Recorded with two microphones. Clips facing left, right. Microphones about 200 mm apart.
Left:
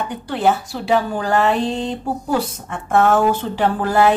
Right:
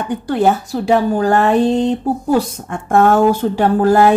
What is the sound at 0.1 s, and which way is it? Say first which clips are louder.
A woman's voice: right 5 dB; 45° right (ahead or behind).